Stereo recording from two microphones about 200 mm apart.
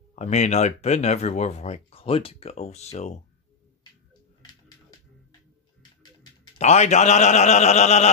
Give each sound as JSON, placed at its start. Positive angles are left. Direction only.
{"t": 0.1, "sound": "speech", "side_deg": 35}
{"t": 6.6, "sound": "speech", "side_deg": 35}